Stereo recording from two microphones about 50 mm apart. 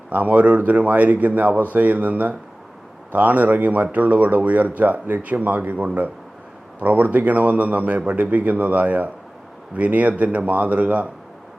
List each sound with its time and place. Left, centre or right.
0.1 s a man's voice: right